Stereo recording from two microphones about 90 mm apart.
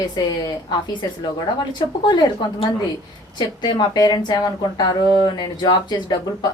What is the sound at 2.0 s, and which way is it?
A woman's voice, 60° left (ahead or behind).